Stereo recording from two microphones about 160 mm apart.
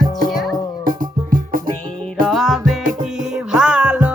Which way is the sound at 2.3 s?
Centre (ahead or behind).